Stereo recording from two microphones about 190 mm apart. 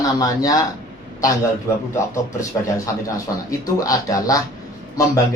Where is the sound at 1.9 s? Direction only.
15° left (ahead or behind).